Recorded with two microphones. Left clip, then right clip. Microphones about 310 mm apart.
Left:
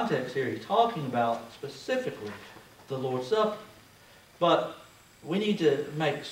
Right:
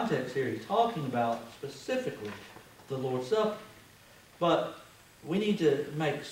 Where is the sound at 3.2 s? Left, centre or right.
Centre.